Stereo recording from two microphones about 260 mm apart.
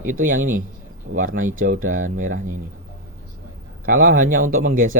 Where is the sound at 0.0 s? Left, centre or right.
Right.